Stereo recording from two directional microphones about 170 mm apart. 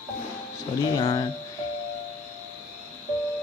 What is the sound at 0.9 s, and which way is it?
Speech, 20° left (ahead or behind).